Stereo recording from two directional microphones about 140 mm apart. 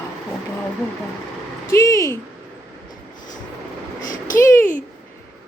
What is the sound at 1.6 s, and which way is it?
Speech, 20° left (ahead or behind).